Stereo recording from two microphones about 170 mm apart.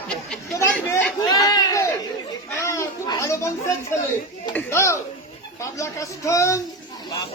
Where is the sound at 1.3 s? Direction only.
20° left (ahead or behind).